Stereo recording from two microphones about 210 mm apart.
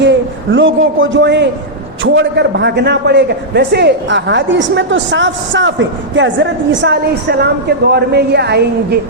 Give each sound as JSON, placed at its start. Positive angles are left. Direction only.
{"t": 0.0, "sound": "a man's voice", "side_deg": -60}